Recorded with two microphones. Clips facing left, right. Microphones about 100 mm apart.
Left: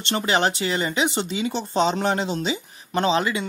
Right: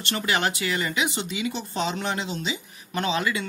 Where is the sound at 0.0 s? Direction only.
30° left (ahead or behind).